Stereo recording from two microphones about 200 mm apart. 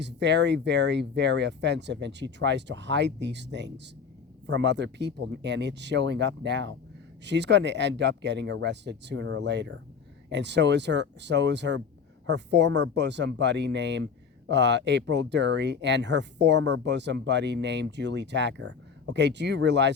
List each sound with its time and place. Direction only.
0.0 s speech: 60° right (ahead or behind)